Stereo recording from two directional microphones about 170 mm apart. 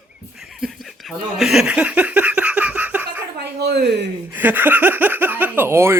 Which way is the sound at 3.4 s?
75° right (ahead or behind).